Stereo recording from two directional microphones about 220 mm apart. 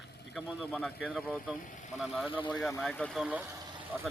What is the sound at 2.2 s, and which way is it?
Speech, 20° left (ahead or behind).